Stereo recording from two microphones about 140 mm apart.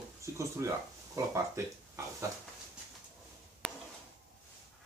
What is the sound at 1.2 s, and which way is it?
Speech, 20° right (ahead or behind).